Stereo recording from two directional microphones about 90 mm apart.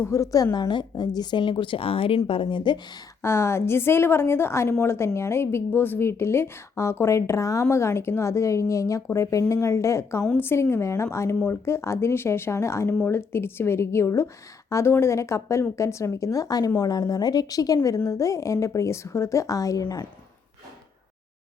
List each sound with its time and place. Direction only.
0.0 s a woman's voice: 35° left (ahead or behind)
0.5 s speech: 55° left (ahead or behind)
3.2 s a woman's voice: 30° left (ahead or behind)